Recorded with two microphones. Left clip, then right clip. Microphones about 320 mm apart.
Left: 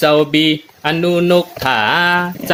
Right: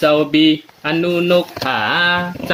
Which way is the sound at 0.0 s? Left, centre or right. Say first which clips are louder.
Left 1 dB; left.